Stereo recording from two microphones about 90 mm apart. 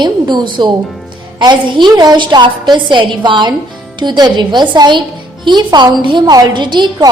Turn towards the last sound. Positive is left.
turn(degrees=-55)  # may be behind; listen again after turning